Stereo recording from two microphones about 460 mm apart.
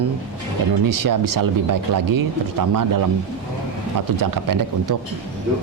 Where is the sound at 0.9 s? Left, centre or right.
Right.